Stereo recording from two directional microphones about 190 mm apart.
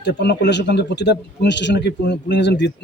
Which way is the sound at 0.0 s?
65° left (ahead or behind).